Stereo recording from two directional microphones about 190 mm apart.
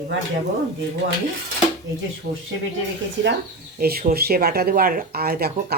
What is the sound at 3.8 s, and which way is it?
Speech, 55° right (ahead or behind).